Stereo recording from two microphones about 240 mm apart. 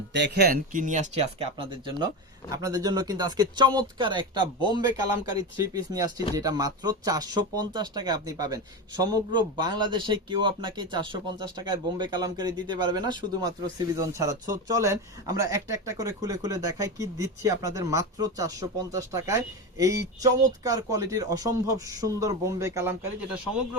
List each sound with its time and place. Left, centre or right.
0.1 s speech: right; by 23.4 s centre